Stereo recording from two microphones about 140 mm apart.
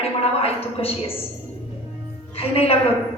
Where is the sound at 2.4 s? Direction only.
45° left (ahead or behind).